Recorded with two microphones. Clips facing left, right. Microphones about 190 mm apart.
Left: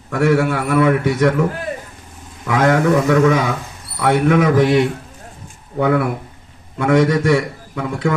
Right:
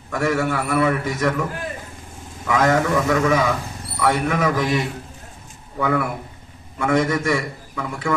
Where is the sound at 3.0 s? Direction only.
55° left (ahead or behind).